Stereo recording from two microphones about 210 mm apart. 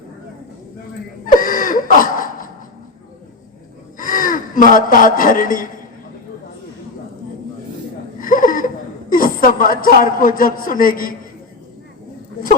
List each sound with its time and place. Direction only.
1.3 s laughter: 40° left (ahead or behind)
3.9 s speech: 40° left (ahead or behind)
8.2 s a sound: 40° left (ahead or behind)
9.1 s a man's voice: 40° left (ahead or behind)